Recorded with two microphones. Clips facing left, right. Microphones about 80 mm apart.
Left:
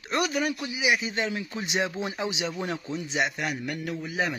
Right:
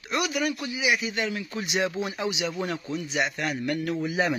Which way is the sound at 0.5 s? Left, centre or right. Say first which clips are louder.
Even; centre.